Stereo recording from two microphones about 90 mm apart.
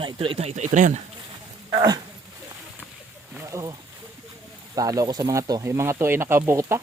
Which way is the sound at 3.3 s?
35° right (ahead or behind).